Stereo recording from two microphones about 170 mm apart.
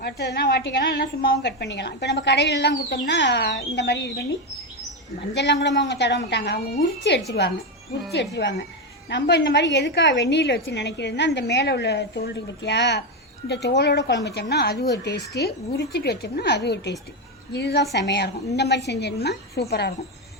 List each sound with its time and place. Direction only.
0.0 s a woman's voice: 75° left (ahead or behind)
5.3 s a woman's voice: 90° left
13.5 s a woman's voice: 80° left
14.5 s a woman's voice: 70° left (ahead or behind)